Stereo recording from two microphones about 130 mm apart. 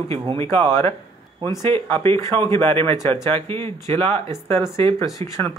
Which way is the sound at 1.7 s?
45° right (ahead or behind).